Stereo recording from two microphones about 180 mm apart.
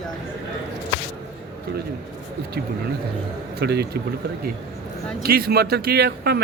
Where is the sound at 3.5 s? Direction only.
65° right (ahead or behind).